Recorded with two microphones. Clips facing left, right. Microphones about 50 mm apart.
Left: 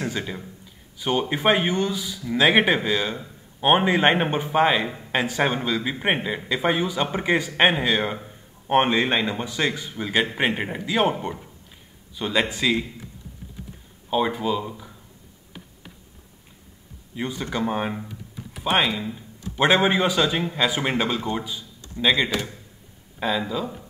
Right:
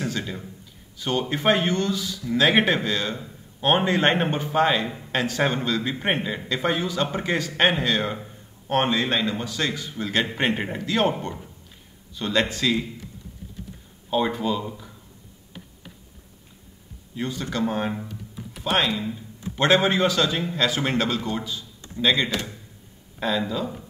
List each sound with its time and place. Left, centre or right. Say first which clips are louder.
0.0 s speech: even; centre
14.1 s speech: left 1 dB; centre
17.1 s speech: left 1 dB; centre